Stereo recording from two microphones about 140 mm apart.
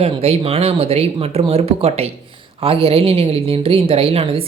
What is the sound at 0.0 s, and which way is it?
A woman's voice, 45° right (ahead or behind).